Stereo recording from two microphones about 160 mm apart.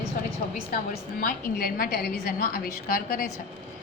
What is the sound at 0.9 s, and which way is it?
A woman's voice, 65° left (ahead or behind).